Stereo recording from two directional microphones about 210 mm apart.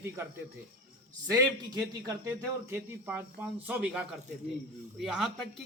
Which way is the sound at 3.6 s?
5° right (ahead or behind).